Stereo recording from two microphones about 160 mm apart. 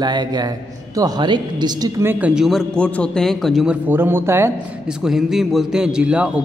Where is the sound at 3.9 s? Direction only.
15° right (ahead or behind).